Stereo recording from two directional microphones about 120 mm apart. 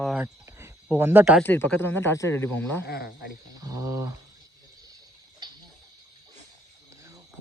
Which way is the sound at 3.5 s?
30° right (ahead or behind).